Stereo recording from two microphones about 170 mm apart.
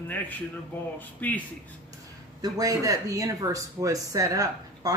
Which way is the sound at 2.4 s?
20° right (ahead or behind).